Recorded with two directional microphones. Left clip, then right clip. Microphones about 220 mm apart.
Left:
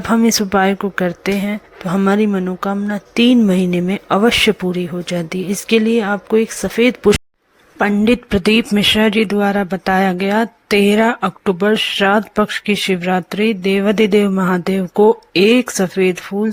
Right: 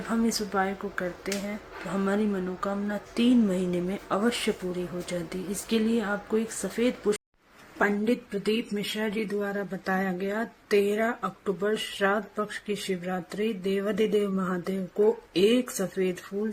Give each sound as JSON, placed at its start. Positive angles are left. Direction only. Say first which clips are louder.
{"t": 0.1, "sound": "a woman's voice", "louder": "left 14 dB", "side_deg": 40}